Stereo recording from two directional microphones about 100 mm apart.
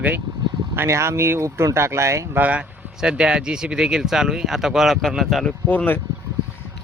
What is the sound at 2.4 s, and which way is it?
Speech, 10° right (ahead or behind).